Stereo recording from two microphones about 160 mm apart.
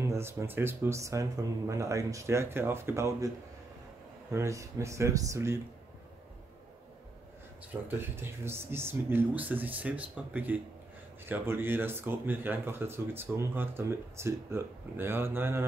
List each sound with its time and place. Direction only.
0.1 s speech: 15° right (ahead or behind)
4.3 s speech: 20° right (ahead or behind)
8.2 s speech: 15° right (ahead or behind)